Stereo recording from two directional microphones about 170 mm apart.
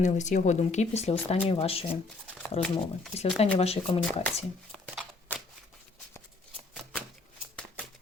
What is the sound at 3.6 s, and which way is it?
Speech, 35° left (ahead or behind).